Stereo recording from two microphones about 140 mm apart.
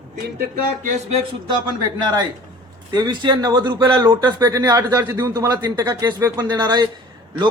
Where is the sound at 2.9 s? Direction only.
30° right (ahead or behind).